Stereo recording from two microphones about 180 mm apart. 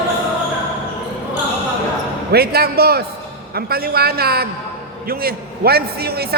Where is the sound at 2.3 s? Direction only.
60° right (ahead or behind).